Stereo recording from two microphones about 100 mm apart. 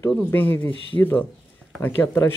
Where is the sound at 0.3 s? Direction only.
20° left (ahead or behind).